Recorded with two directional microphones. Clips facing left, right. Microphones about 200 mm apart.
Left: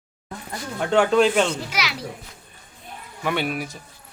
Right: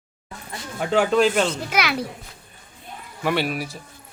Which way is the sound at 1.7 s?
55° right (ahead or behind).